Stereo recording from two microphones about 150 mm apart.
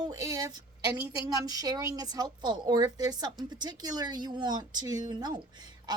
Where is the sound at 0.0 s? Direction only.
25° right (ahead or behind).